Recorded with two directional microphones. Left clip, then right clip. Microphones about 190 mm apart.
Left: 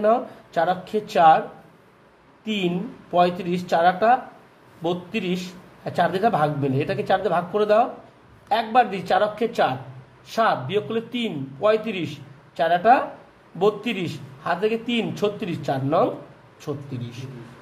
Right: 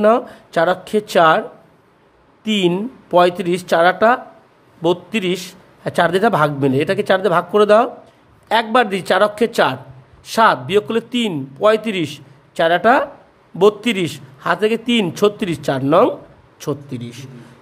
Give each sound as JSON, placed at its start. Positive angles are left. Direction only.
{"t": 0.0, "sound": "a man's voice", "side_deg": -50}
{"t": 2.4, "sound": "a man's voice", "side_deg": -50}